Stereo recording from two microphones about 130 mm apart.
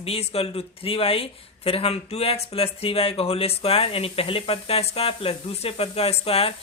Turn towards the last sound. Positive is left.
turn(degrees=50)  # may be behind; listen again after turning